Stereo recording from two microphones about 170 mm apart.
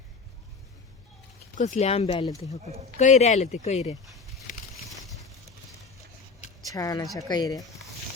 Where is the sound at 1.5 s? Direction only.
45° left (ahead or behind).